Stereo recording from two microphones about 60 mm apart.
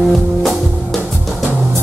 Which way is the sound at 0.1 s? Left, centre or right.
Centre.